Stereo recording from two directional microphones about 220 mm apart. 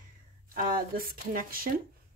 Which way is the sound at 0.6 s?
40° right (ahead or behind).